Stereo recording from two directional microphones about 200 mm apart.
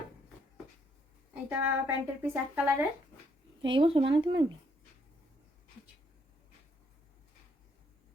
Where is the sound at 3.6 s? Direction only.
25° right (ahead or behind).